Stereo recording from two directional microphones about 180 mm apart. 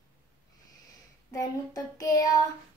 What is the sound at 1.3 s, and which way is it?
Child singing, 20° left (ahead or behind).